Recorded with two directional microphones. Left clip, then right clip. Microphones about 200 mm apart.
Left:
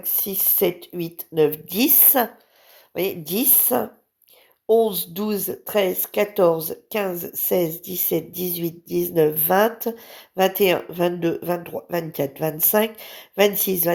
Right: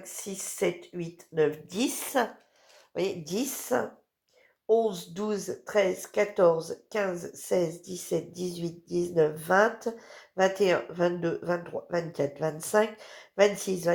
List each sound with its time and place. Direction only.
0.2 s speech: 45° left (ahead or behind)